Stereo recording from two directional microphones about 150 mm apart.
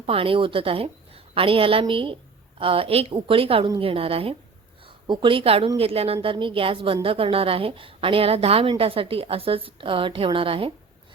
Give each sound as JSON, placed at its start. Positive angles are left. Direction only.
{"t": 0.0, "sound": "a woman's voice", "side_deg": -40}